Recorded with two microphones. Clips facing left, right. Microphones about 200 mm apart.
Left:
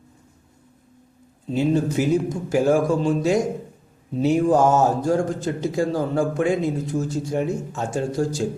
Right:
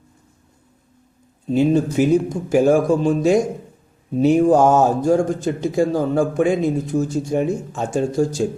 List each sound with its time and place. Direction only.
1.5 s speech: 15° right (ahead or behind)